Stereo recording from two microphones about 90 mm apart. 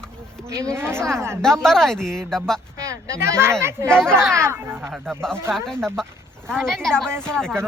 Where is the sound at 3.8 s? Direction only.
10° left (ahead or behind).